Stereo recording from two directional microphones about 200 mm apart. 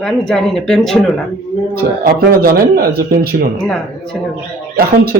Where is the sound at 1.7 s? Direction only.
50° right (ahead or behind).